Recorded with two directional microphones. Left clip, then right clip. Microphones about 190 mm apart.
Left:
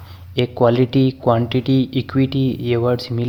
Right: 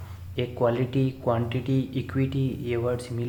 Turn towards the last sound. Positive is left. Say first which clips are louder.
# left 9 dB
turn(degrees=50)  # may be behind; listen again after turning